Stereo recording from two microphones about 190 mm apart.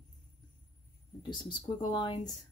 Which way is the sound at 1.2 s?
25° left (ahead or behind).